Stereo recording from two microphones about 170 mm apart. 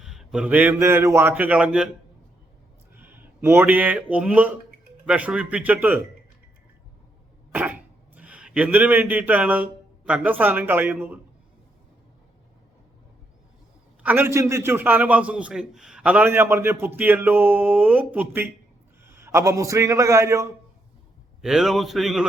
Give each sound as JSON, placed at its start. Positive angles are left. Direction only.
{"t": 0.0, "sound": "a man's voice", "side_deg": 0}
{"t": 3.0, "sound": "a sound", "side_deg": -10}
{"t": 4.1, "sound": "a man's voice", "side_deg": -5}
{"t": 7.5, "sound": "speech", "side_deg": -10}
{"t": 14.0, "sound": "a man's voice", "side_deg": -10}
{"t": 21.4, "sound": "a man's voice", "side_deg": 0}